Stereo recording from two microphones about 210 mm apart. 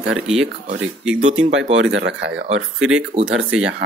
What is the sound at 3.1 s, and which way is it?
Speech, 25° right (ahead or behind).